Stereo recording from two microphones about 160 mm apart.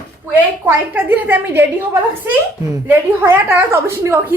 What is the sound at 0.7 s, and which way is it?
A woman's voice, 10° right (ahead or behind).